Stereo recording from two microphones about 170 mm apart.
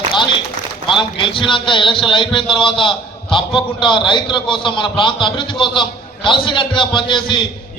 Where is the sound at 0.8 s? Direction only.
30° left (ahead or behind).